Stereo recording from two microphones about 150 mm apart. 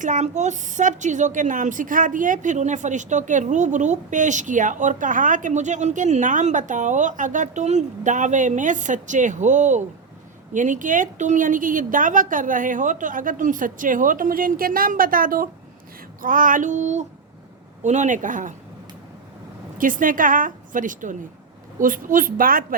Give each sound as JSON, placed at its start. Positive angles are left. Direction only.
{"t": 0.0, "sound": "a woman's voice", "side_deg": -55}
{"t": 19.8, "sound": "a woman's voice", "side_deg": -65}